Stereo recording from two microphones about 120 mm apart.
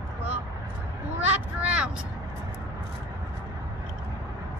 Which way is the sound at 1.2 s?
10° right (ahead or behind).